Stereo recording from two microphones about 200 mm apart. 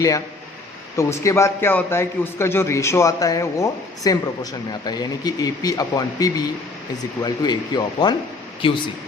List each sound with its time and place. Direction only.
0.9 s a man's voice: 15° left (ahead or behind)